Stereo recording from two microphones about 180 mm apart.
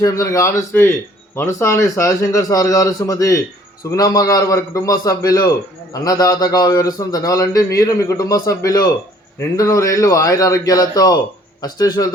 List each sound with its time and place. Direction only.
0.0 s a man's voice: 15° left (ahead or behind)